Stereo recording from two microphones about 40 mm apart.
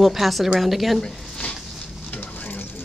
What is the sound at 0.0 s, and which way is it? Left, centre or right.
Speech, centre.